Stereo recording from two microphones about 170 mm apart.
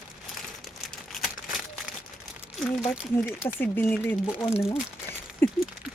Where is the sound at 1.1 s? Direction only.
Centre (ahead or behind).